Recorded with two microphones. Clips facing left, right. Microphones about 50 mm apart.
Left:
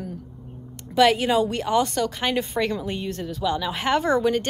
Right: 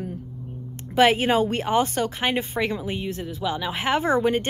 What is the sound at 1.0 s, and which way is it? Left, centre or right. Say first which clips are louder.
Speech: even; right.